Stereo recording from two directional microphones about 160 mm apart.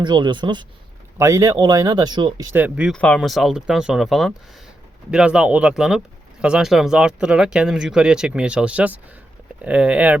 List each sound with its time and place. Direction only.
0.0 s speech: 30° right (ahead or behind)
2.5 s speech: 10° right (ahead or behind)
2.9 s speech: 5° left (ahead or behind)